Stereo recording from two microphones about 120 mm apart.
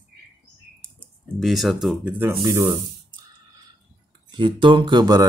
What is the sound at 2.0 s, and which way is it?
Speech, 15° right (ahead or behind).